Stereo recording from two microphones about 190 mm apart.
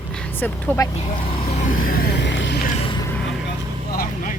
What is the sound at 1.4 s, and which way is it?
Vehicle, 35° left (ahead or behind).